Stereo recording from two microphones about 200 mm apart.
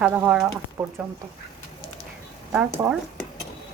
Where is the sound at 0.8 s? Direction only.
15° right (ahead or behind).